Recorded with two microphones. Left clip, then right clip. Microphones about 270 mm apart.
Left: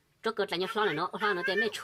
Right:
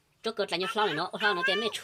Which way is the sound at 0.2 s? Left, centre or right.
Centre.